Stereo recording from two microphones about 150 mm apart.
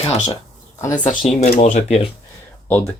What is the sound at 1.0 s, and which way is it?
Speech, 60° left (ahead or behind).